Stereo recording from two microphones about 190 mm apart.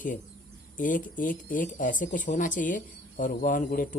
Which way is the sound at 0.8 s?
45° left (ahead or behind).